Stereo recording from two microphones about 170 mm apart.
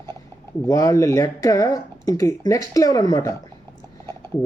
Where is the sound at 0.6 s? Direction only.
20° left (ahead or behind).